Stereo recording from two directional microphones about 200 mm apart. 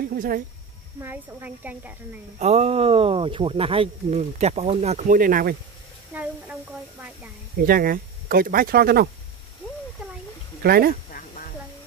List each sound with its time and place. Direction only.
0.0 s a sound: 45° right (ahead or behind)
1.0 s a woman's voice: 10° right (ahead or behind)
2.3 s speech: 35° right (ahead or behind)
6.1 s a woman's voice: 10° right (ahead or behind)
7.6 s speech: 45° right (ahead or behind)
10.6 s speech: 50° right (ahead or behind)
11.1 s a sound: 45° left (ahead or behind)